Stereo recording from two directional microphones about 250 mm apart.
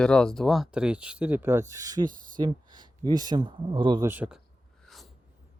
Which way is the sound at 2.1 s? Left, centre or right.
Right.